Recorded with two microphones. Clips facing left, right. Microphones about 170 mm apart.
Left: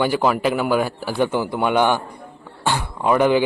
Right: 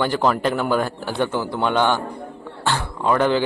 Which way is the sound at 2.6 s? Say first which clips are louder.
Left 1 dB; 15° left (ahead or behind).